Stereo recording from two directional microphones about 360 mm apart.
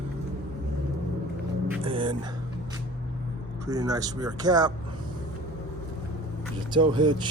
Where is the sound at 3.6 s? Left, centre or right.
Centre.